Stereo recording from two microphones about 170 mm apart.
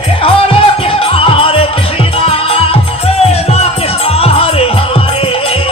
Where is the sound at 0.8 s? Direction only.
35° left (ahead or behind).